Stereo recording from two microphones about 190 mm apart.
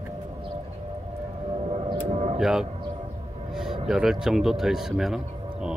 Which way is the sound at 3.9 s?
Centre (ahead or behind).